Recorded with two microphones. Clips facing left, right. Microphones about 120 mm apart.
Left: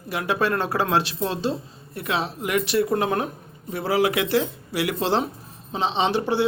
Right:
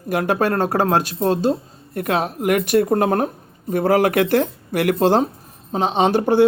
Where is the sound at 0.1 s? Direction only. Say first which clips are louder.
Right 5 dB; 50° right (ahead or behind).